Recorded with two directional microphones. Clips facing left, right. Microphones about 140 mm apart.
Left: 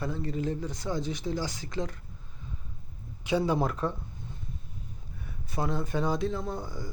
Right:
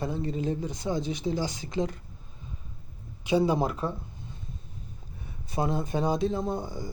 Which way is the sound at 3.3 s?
15° right (ahead or behind).